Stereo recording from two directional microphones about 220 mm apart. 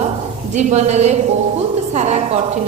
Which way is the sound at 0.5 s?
30° right (ahead or behind).